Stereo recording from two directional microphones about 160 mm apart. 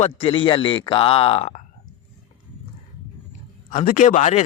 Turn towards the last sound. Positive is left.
turn(degrees=50)  # may be behind; listen again after turning